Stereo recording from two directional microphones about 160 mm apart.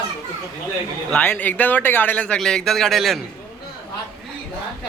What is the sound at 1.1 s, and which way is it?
Speech, 10° left (ahead or behind).